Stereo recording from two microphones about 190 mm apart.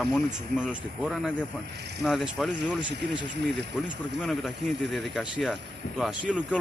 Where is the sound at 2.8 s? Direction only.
65° right (ahead or behind).